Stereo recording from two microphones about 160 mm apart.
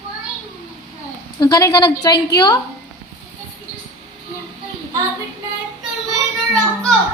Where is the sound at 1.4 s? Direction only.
20° left (ahead or behind).